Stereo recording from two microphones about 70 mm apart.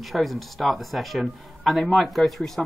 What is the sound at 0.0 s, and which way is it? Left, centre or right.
Speech, centre.